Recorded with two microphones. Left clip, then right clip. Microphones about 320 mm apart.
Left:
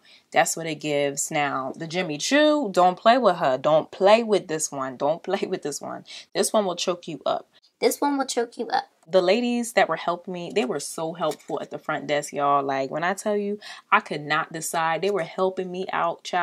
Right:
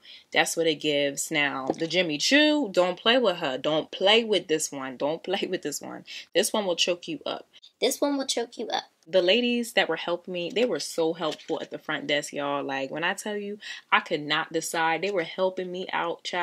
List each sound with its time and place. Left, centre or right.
0.3 s speech: left
7.8 s speech: left
9.1 s speech: left